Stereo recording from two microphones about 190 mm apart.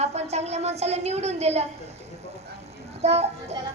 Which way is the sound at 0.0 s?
35° right (ahead or behind).